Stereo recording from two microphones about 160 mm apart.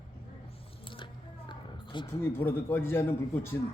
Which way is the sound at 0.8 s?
30° left (ahead or behind).